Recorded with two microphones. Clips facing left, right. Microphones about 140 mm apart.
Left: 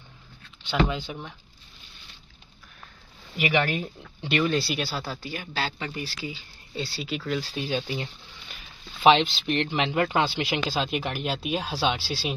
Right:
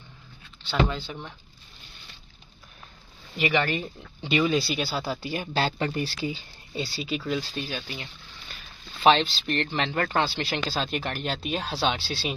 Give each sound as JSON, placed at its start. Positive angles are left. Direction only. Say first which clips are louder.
{"t": 0.7, "sound": "speech", "louder": "left 1 dB", "side_deg": 15}
{"t": 3.3, "sound": "speech", "louder": "even", "side_deg": 5}
{"t": 5.0, "sound": "speech", "louder": "right 4 dB", "side_deg": -15}
{"t": 5.7, "sound": "speech", "louder": "right 6 dB", "side_deg": -45}
{"t": 6.0, "sound": "speech", "louder": "right 5 dB", "side_deg": -30}
{"t": 6.7, "sound": "speech", "louder": "right 1 dB", "side_deg": 0}
{"t": 7.7, "sound": "speech", "louder": "left 7 dB", "side_deg": 25}
{"t": 9.0, "sound": "speech", "louder": "left 1 dB", "side_deg": 15}